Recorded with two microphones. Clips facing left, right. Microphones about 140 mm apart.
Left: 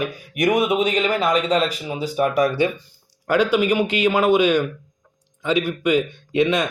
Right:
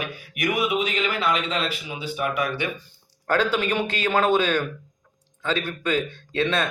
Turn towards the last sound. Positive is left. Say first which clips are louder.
# left 5 dB
turn(degrees=15)  # may be behind; listen again after turning